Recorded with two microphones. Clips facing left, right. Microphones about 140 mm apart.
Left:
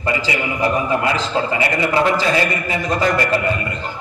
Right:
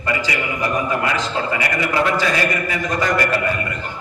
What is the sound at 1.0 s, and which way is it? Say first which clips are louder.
A man's voice: left 2 dB; 25° left (ahead or behind).